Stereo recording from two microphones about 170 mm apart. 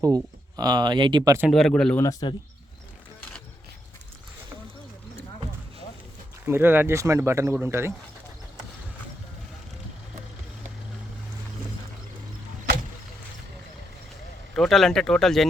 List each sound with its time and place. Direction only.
0.0 s speech: 20° right (ahead or behind)
1.5 s speech: centre (ahead or behind)
6.4 s speech: 15° right (ahead or behind)
14.5 s speech: centre (ahead or behind)